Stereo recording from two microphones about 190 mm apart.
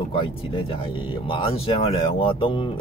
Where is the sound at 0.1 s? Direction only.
25° left (ahead or behind).